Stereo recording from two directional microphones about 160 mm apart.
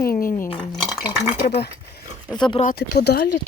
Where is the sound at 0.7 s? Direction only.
Centre (ahead or behind).